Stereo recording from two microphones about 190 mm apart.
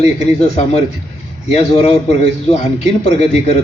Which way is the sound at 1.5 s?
35° left (ahead or behind).